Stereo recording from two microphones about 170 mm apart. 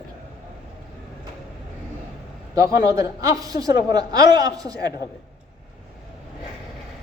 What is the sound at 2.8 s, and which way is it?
A man's voice, 20° right (ahead or behind).